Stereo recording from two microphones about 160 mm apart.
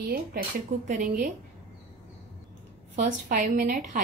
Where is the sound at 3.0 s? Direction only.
55° right (ahead or behind).